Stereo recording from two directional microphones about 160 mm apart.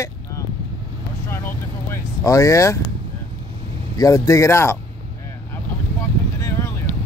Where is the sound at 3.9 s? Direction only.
20° left (ahead or behind).